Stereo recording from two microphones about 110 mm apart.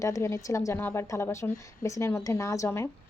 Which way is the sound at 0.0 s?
30° left (ahead or behind).